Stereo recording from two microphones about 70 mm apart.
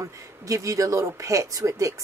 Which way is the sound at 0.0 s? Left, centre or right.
Right.